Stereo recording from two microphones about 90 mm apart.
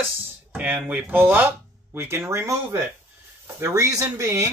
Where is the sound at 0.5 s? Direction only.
20° right (ahead or behind); by 4.5 s 35° right (ahead or behind).